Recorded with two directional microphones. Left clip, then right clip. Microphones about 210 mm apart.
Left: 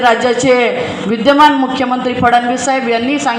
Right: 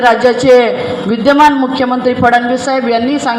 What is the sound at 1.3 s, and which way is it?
A man's voice, 45° right (ahead or behind).